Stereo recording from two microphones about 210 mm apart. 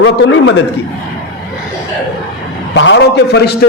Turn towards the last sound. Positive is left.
turn(degrees=55)  # may be behind; listen again after turning